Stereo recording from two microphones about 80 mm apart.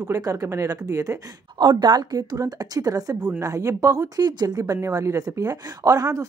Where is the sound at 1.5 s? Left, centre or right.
Right.